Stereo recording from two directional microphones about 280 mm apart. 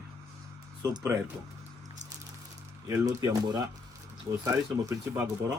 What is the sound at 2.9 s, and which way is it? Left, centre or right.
A man's voice, centre.